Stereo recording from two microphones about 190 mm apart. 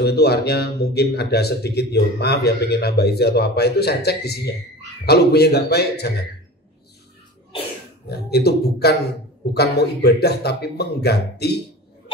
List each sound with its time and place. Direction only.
0.0 s speech: 60° left (ahead or behind)
8.1 s speech: 60° left (ahead or behind)